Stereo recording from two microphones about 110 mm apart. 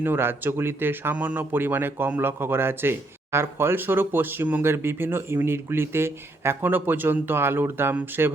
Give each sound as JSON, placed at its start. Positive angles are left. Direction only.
{"t": 0.0, "sound": "speech", "side_deg": -20}